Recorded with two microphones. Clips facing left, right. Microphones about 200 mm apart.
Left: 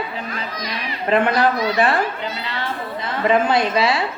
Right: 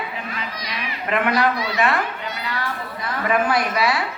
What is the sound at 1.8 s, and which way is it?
Chatter, 30° left (ahead or behind).